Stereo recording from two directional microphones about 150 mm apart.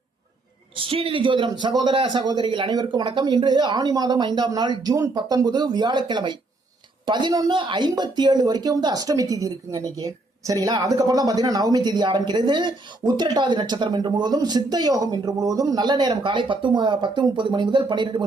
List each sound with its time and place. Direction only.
0.8 s a man's voice: 35° right (ahead or behind)